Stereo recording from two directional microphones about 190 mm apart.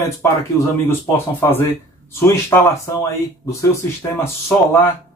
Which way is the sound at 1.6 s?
15° left (ahead or behind).